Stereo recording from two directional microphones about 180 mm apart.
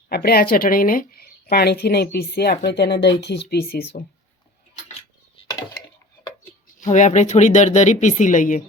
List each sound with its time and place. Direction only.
0.1 s speech: 60° left (ahead or behind)
6.7 s speech: 45° left (ahead or behind)